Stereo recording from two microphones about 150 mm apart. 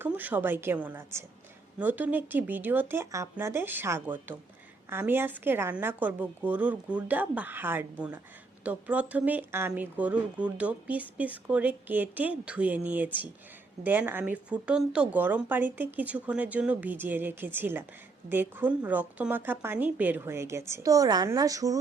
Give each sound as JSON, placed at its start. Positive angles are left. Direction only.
{"t": 0.0, "sound": "a woman's voice", "side_deg": -10}